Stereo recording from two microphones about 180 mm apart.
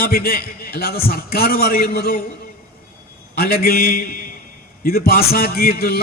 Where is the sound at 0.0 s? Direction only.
55° left (ahead or behind).